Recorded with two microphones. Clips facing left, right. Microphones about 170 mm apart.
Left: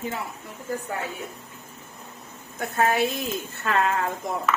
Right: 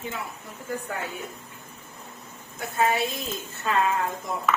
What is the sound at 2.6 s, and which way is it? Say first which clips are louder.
A woman's voice: left 2 dB; 60° left (ahead or behind).